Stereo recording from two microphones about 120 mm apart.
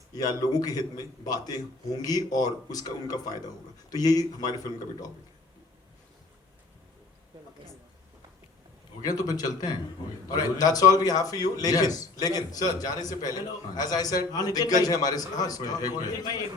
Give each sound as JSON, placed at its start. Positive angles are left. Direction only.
{"t": 0.1, "sound": "a man's voice", "side_deg": 30}
{"t": 9.0, "sound": "a man's voice", "side_deg": 30}